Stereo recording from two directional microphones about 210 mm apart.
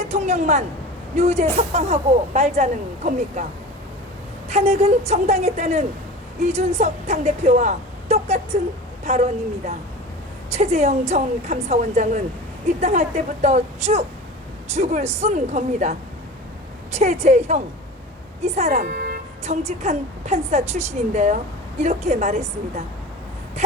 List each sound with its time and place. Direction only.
0.0 s a sound: 30° right (ahead or behind)
1.1 s speech: 30° right (ahead or behind)
4.4 s a woman's voice: 30° right (ahead or behind)
18.8 s vehicle: 45° right (ahead or behind)
19.5 s speech: 30° right (ahead or behind)